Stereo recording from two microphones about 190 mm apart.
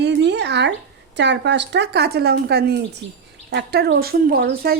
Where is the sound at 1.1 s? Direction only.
65° right (ahead or behind).